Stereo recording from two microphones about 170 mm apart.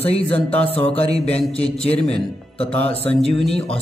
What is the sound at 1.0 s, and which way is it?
Speech, 35° left (ahead or behind).